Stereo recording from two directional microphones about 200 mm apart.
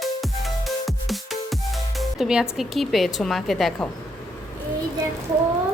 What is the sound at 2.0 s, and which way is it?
Speech, 5° right (ahead or behind).